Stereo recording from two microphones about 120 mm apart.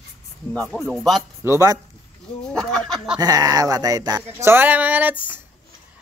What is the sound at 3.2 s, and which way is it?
Speech, 30° right (ahead or behind).